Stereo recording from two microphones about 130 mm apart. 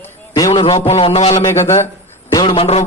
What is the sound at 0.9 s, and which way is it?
Speech, 50° left (ahead or behind).